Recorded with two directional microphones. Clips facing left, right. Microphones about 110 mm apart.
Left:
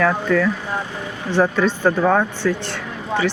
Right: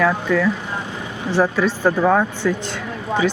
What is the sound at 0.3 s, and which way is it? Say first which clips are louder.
Speech: even; 10° right (ahead or behind).